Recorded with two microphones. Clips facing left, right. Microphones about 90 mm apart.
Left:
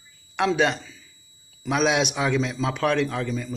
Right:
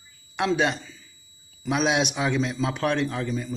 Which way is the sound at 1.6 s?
40° left (ahead or behind).